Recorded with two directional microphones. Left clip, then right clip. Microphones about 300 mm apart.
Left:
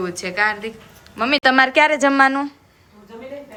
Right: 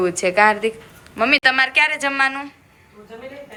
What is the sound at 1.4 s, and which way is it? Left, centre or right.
Speech, centre.